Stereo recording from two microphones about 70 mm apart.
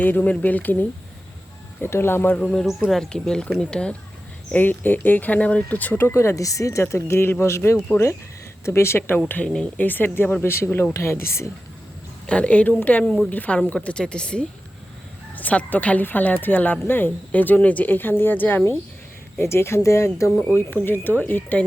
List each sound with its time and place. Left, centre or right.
0.0 s speech: left
2.4 s a woman's voice: centre
4.5 s speech: left
6.1 s speech: left
6.9 s speech: left
12.2 s a woman's voice: centre; by 20.1 s left
20.6 s speech: left